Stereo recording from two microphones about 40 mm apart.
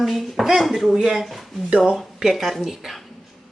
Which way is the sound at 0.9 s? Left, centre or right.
Centre.